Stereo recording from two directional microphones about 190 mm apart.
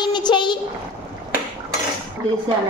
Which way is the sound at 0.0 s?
25° left (ahead or behind).